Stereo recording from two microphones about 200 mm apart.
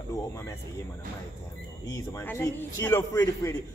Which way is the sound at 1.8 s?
15° left (ahead or behind).